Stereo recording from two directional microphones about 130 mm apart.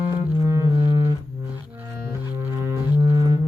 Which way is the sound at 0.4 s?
25° right (ahead or behind).